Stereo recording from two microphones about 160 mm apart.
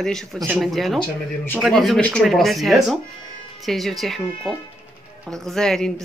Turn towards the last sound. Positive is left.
turn(degrees=5)  # may be behind; listen again after turning